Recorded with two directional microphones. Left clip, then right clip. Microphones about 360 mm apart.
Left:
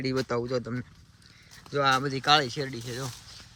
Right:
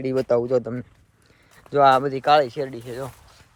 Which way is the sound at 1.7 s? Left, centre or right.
Centre.